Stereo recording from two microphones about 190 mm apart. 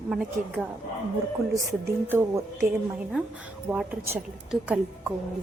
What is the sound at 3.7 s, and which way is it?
A woman's voice, 10° right (ahead or behind).